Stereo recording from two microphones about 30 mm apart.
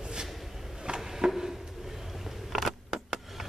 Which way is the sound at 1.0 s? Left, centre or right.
Centre.